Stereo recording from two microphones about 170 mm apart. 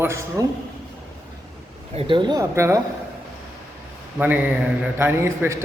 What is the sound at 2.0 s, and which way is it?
Speech, 30° right (ahead or behind).